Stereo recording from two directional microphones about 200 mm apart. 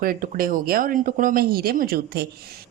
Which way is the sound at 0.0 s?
45° right (ahead or behind).